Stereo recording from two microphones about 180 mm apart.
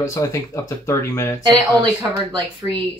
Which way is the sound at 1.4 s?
20° right (ahead or behind).